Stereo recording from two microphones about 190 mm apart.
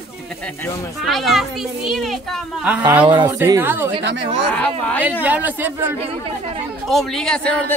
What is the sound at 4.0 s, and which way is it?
Speech, 65° right (ahead or behind).